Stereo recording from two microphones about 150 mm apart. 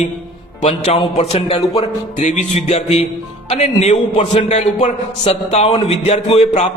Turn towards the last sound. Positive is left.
turn(degrees=50)  # may be behind; listen again after turning